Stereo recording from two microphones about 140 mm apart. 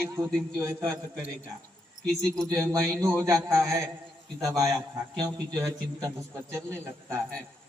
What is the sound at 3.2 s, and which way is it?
Speech, 20° right (ahead or behind).